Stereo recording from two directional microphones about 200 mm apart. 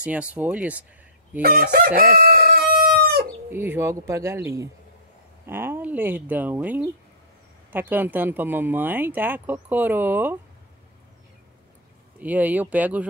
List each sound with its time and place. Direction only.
0.0 s speech: 5° right (ahead or behind)
1.4 s crowing: 45° right (ahead or behind)
2.0 s chicken: 45° right (ahead or behind)
3.4 s speech: 10° right (ahead or behind)
12.2 s speech: 10° right (ahead or behind)